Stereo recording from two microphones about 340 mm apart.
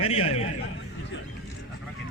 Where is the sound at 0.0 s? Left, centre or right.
Centre.